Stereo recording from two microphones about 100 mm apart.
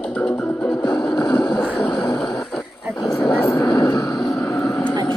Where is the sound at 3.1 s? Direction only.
5° left (ahead or behind).